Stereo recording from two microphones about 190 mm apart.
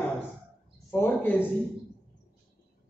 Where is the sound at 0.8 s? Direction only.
10° left (ahead or behind).